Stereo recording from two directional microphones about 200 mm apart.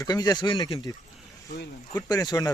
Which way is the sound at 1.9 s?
20° left (ahead or behind).